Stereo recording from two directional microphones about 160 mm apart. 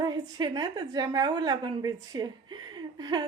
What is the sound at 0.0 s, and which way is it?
A woman's voice, 25° right (ahead or behind).